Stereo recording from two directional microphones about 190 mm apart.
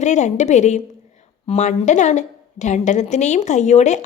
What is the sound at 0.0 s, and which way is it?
A woman's voice, 40° left (ahead or behind).